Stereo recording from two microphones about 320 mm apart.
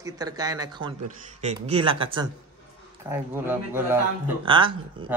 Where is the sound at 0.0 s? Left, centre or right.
Centre.